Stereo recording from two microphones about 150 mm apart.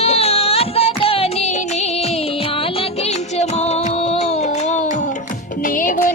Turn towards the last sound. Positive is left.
turn(degrees=65)  # may be behind; listen again after turning